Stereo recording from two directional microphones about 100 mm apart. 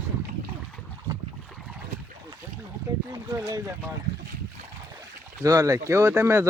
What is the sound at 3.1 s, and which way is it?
Speech, 35° right (ahead or behind).